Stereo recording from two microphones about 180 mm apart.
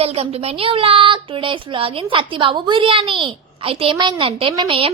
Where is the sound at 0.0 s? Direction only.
35° right (ahead or behind).